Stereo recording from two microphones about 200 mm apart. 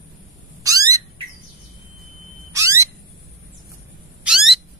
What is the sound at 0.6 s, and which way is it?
Cat, 15° right (ahead or behind).